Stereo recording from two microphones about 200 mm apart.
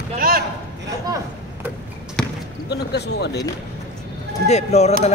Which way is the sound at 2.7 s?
55° left (ahead or behind).